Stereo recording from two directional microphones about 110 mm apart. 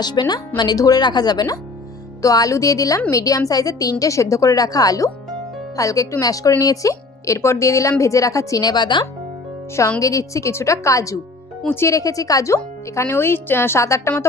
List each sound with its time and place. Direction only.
0.0 s a woman's voice: 40° left (ahead or behind)
10.0 s speech: 30° left (ahead or behind)